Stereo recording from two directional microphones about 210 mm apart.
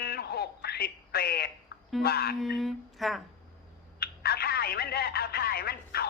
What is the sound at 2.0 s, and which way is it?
Speech, 50° left (ahead or behind).